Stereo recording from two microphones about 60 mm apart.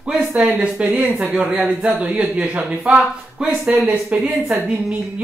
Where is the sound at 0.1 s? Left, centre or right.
Right.